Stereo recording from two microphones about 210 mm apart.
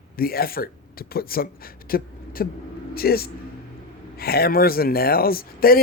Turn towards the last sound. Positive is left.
turn(degrees=45)  # may be behind; listen again after turning